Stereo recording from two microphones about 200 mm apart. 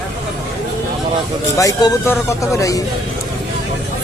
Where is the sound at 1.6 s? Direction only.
15° left (ahead or behind).